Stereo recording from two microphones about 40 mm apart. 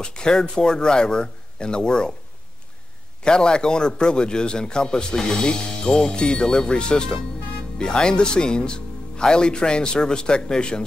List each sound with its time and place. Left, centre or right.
0.0 s a man's voice: centre
3.3 s a man's voice: left